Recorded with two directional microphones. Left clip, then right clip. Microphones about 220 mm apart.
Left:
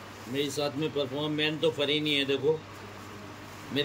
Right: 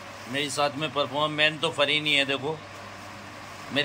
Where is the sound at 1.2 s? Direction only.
5° left (ahead or behind).